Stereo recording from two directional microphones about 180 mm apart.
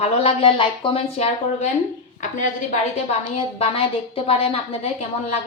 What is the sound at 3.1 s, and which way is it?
A woman's voice, 35° left (ahead or behind).